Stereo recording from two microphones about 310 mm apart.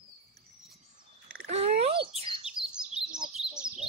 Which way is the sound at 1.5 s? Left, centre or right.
Centre.